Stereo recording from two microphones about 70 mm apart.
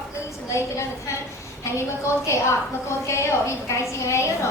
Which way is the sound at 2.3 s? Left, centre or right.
Left.